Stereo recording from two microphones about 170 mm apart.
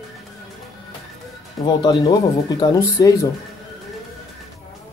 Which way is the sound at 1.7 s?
25° left (ahead or behind).